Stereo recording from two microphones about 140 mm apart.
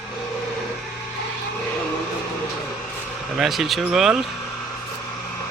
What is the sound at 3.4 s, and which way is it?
Speech, centre (ahead or behind).